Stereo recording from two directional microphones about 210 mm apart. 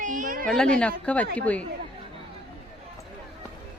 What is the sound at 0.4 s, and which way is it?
Speech, 5° left (ahead or behind).